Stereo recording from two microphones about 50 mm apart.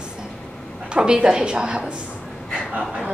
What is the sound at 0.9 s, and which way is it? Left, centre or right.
A woman's voice, centre.